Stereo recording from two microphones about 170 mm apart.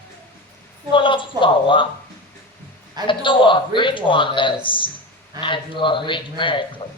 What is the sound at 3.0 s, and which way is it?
Speech, 30° left (ahead or behind).